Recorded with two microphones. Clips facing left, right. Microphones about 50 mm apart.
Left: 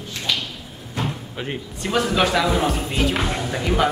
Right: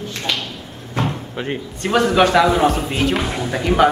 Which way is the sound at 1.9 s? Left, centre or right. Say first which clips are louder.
Right 5 dB; centre.